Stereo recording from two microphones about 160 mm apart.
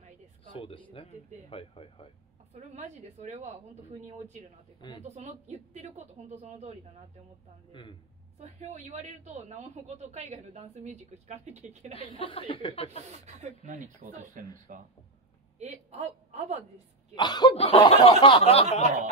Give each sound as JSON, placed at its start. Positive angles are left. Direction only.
{"t": 0.5, "sound": "a man's voice", "side_deg": 35}
{"t": 1.5, "sound": "snicker", "side_deg": 35}
{"t": 2.5, "sound": "a man's voice", "side_deg": -50}
{"t": 5.0, "sound": "a man's voice", "side_deg": -45}
{"t": 8.4, "sound": "a man's voice", "side_deg": -45}
{"t": 11.9, "sound": "snicker", "side_deg": 35}
{"t": 13.7, "sound": "a man's voice", "side_deg": -55}
{"t": 15.6, "sound": "a man's voice", "side_deg": -40}
{"t": 17.1, "sound": "speech", "side_deg": 25}
{"t": 17.6, "sound": "snicker", "side_deg": 35}